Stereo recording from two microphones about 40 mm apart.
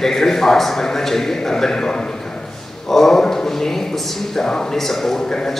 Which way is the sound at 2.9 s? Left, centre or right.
Centre.